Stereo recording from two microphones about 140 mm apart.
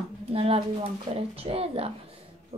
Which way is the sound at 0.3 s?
45° right (ahead or behind).